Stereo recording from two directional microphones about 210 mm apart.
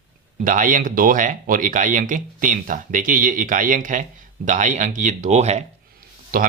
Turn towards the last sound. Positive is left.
turn(degrees=-40)  # may be behind; listen again after turning